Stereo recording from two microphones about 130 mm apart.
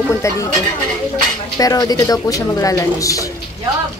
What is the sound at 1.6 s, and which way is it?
A woman's voice, 30° left (ahead or behind).